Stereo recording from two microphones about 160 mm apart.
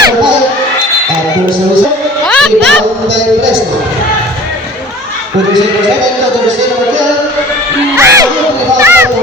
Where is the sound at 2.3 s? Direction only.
5° left (ahead or behind).